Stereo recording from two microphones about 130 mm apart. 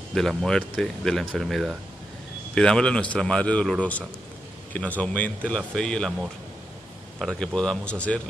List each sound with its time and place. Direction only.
0.1 s speech: 5° left (ahead or behind)
4.7 s speech: 10° left (ahead or behind)
7.2 s speech: 5° left (ahead or behind)